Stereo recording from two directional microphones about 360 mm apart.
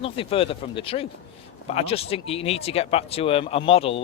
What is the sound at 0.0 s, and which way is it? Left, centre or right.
Speech, centre.